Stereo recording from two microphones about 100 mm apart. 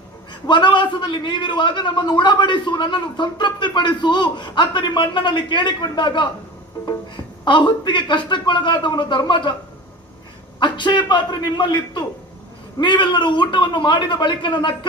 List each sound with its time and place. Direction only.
0.4 s a man's voice: 50° left (ahead or behind)
7.4 s a man's voice: 50° left (ahead or behind)
10.6 s a man's voice: 50° left (ahead or behind)